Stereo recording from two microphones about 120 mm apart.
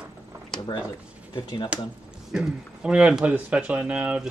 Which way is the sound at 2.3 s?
5° right (ahead or behind).